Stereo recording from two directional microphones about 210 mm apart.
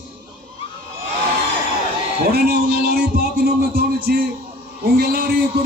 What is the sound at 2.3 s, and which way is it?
A man's voice, 50° right (ahead or behind).